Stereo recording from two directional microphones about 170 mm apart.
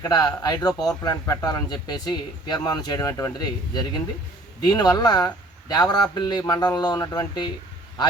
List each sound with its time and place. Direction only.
0.0 s speech: 20° left (ahead or behind)